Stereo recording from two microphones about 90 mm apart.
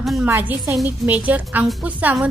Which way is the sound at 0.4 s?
20° right (ahead or behind).